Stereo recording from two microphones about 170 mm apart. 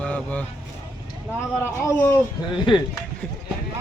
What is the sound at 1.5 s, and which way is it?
Speech, 15° left (ahead or behind).